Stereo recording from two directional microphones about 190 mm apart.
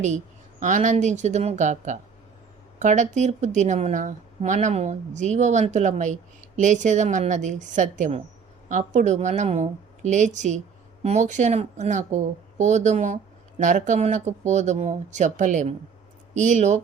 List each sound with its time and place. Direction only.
0.6 s speech: 40° right (ahead or behind)